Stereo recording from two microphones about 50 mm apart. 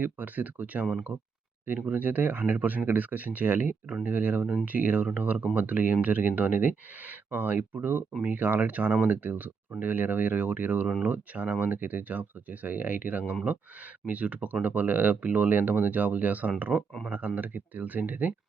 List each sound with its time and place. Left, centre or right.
0.0 s speech: right